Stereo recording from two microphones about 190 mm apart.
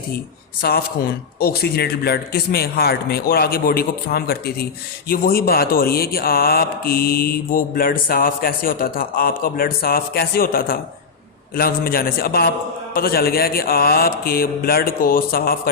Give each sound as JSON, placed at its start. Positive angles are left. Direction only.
{"t": 0.6, "sound": "a man's voice", "side_deg": 55}